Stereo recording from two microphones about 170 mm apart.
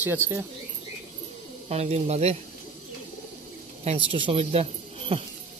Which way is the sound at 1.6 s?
40° right (ahead or behind).